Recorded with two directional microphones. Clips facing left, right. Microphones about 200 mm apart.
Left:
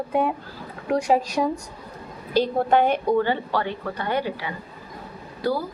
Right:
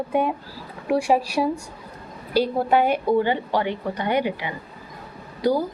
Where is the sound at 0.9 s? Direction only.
10° right (ahead or behind).